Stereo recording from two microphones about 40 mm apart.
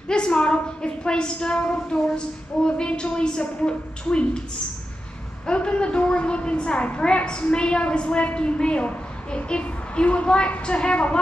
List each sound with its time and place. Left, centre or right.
0.1 s a sound: left
1.6 s a woman's voice: left
5.5 s a woman's voice: left